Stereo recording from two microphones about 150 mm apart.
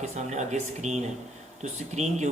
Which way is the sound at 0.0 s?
50° right (ahead or behind).